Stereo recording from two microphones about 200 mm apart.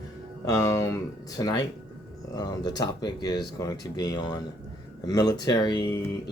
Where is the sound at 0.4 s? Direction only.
15° left (ahead or behind).